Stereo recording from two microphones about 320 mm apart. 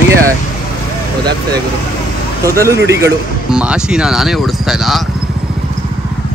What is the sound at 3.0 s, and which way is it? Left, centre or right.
Speech, centre.